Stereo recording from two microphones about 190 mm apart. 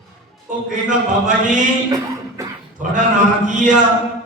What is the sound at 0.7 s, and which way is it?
Speech, 40° right (ahead or behind).